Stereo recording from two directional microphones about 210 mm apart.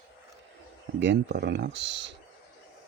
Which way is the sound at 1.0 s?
55° right (ahead or behind).